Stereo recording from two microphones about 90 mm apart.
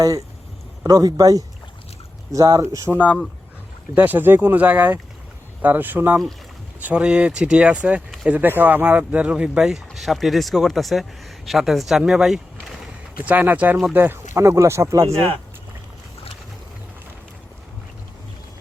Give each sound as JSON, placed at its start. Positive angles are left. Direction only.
{"t": 0.9, "sound": "speech", "side_deg": -45}
{"t": 2.9, "sound": "speech", "side_deg": -5}
{"t": 3.9, "sound": "speech", "side_deg": -20}
{"t": 13.2, "sound": "speech", "side_deg": -20}
{"t": 14.3, "sound": "speech", "side_deg": -35}